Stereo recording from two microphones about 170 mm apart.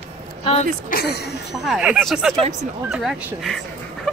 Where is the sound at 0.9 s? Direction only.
55° left (ahead or behind).